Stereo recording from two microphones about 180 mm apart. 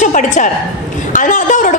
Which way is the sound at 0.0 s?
45° left (ahead or behind).